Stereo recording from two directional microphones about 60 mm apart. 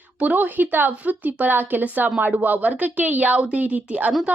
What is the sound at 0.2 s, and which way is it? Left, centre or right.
A woman's voice, right.